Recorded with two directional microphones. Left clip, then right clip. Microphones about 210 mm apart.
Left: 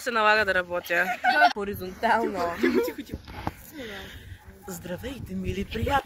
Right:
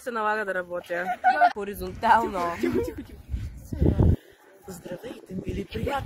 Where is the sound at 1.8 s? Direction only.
40° right (ahead or behind).